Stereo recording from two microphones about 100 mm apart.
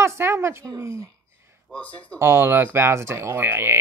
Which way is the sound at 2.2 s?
25° right (ahead or behind).